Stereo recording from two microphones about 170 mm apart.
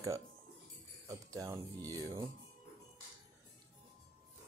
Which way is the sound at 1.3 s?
20° right (ahead or behind).